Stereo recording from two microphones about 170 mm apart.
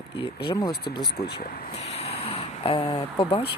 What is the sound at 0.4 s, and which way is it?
Speech, 25° left (ahead or behind).